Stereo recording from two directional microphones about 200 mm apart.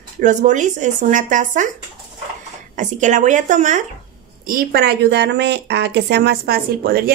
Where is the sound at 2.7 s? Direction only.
40° right (ahead or behind).